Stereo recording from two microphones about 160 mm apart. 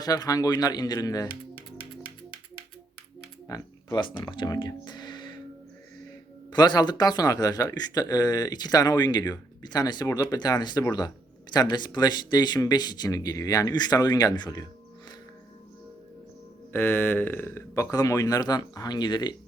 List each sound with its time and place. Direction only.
0.0 s speech: 25° left (ahead or behind)
1.5 s music: 35° left (ahead or behind)
3.4 s speech: 25° left (ahead or behind)
6.5 s speech: 25° left (ahead or behind)
16.7 s speech: 15° left (ahead or behind)